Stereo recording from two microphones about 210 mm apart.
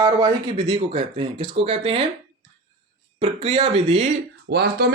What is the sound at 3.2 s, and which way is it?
Speech, 25° right (ahead or behind).